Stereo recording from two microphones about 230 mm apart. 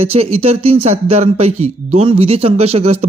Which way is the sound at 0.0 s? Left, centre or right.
Right.